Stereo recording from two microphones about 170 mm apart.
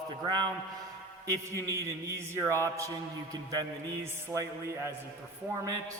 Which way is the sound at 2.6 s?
20° right (ahead or behind).